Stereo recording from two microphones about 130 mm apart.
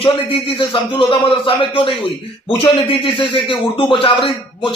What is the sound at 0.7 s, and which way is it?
Speech, 40° left (ahead or behind).